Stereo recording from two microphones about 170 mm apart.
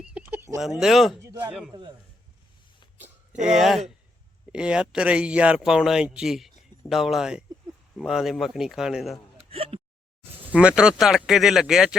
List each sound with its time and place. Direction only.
0.0 s a sound: 10° right (ahead or behind)
0.6 s speech: 5° right (ahead or behind)
1.2 s a man's voice: 15° right (ahead or behind)
3.4 s speech: centre (ahead or behind)
9.5 s a sound: 35° right (ahead or behind)
10.4 s speech: 5° right (ahead or behind)